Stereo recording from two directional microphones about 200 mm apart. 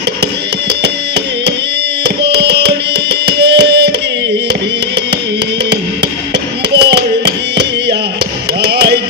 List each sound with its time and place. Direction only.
2.0 s music: 55° right (ahead or behind)
6.7 s a sound: 55° right (ahead or behind)
8.6 s music: 55° right (ahead or behind)